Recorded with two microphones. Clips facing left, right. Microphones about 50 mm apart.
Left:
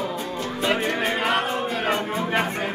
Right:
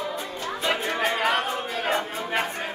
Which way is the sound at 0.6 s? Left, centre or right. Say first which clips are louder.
Left 2 dB; centre.